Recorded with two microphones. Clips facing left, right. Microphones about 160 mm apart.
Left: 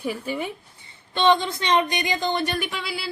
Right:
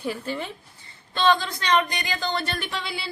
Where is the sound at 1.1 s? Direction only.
20° left (ahead or behind).